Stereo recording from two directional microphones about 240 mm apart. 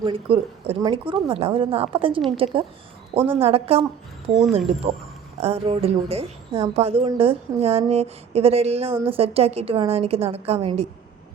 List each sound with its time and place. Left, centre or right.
0.0 s a woman's voice: right